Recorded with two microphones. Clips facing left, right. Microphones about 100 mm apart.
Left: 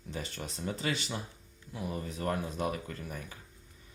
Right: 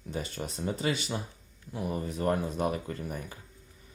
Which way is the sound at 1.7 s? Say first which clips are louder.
Right 4 dB; 25° right (ahead or behind).